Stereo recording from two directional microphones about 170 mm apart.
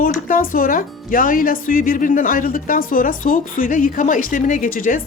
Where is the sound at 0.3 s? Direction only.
55° left (ahead or behind).